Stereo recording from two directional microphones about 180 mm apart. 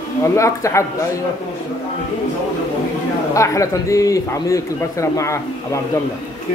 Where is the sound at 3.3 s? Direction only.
15° left (ahead or behind).